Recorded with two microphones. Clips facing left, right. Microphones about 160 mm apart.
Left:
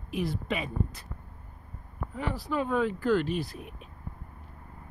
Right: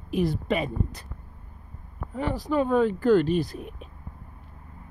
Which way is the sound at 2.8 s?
Centre (ahead or behind).